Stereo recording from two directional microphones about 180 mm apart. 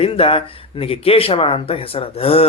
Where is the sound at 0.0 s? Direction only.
30° left (ahead or behind).